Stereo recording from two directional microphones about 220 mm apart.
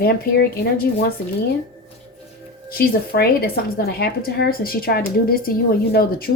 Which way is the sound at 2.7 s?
45° left (ahead or behind).